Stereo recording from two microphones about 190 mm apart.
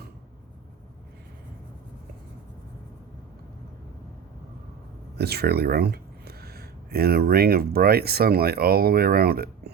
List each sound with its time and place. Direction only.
5.1 s speech: 55° right (ahead or behind)